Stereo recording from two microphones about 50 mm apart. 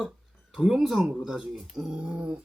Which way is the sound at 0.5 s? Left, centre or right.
Centre.